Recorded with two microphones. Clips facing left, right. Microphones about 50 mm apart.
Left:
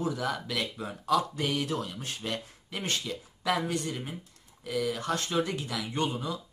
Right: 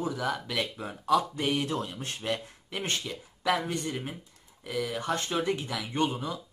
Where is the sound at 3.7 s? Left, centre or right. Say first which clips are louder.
Even; centre.